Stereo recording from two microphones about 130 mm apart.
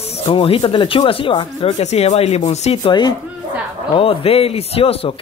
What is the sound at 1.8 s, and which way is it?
Speech, 55° left (ahead or behind).